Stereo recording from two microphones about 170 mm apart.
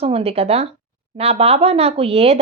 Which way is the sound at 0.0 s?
35° right (ahead or behind).